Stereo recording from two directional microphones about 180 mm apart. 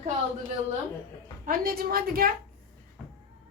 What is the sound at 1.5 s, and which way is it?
Speech, 55° right (ahead or behind).